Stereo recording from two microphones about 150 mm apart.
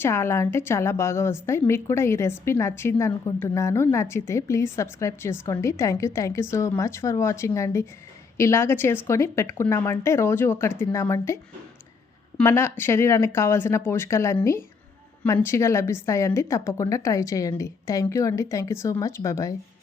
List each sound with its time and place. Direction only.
0.0 s a woman's voice: 15° left (ahead or behind)
12.4 s a woman's voice: 15° left (ahead or behind)